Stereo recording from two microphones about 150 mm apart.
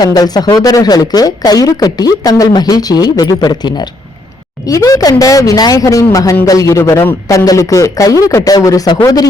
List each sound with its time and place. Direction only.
0.0 s speech: 25° left (ahead or behind)